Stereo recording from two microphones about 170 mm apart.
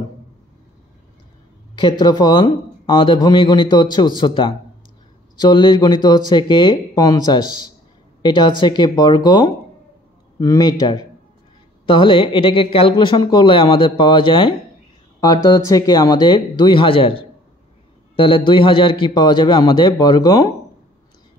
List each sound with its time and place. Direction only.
1.8 s a man's voice: 25° left (ahead or behind)